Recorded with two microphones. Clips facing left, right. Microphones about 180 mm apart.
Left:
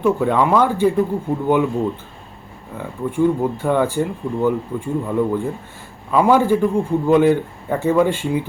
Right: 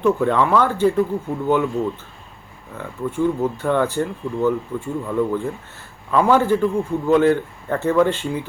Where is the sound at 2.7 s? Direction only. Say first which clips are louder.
Left 2 dB; 10° left (ahead or behind).